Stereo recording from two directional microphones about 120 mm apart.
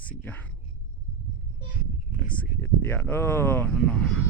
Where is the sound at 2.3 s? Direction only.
15° left (ahead or behind).